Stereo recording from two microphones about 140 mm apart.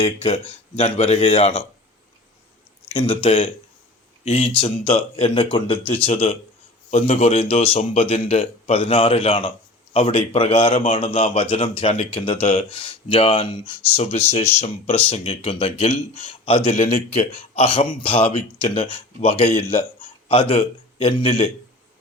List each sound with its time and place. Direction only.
0.3 s a man's voice: 55° left (ahead or behind)
2.9 s a man's voice: 40° left (ahead or behind)
16.7 s speech: 60° left (ahead or behind)
17.5 s a man's voice: 45° left (ahead or behind)